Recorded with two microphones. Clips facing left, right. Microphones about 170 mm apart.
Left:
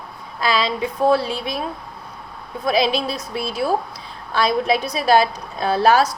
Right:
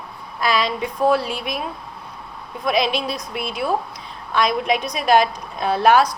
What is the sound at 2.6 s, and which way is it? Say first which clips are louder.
A woman's voice: left 1 dB; 35° left (ahead or behind).